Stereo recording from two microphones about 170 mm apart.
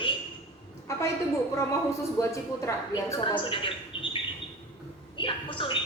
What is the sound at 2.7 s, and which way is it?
Speech, 20° left (ahead or behind).